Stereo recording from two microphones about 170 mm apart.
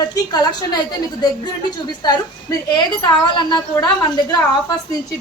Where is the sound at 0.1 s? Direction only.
25° left (ahead or behind).